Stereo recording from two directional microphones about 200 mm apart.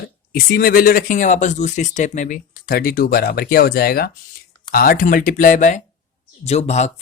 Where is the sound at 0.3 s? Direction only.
45° left (ahead or behind).